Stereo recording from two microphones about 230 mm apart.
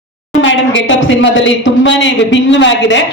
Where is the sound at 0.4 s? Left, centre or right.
Left.